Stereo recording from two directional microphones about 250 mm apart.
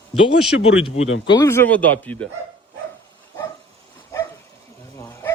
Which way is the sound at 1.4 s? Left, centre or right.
Centre.